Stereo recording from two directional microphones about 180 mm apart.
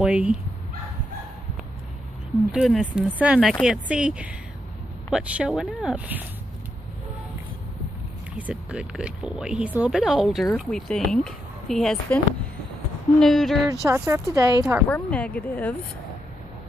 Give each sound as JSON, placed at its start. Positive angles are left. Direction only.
{"t": 0.0, "sound": "speech", "side_deg": -5}
{"t": 2.5, "sound": "speech", "side_deg": 0}
{"t": 8.4, "sound": "speech", "side_deg": -5}
{"t": 13.2, "sound": "speech", "side_deg": 0}
{"t": 13.8, "sound": "speech", "side_deg": -15}
{"t": 14.9, "sound": "speech", "side_deg": 10}